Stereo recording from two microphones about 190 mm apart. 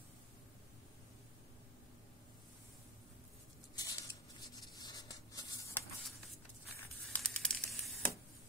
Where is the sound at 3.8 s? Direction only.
20° left (ahead or behind).